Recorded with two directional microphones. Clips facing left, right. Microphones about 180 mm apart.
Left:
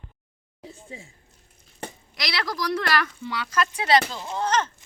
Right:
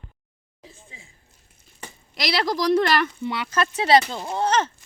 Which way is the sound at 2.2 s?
25° right (ahead or behind).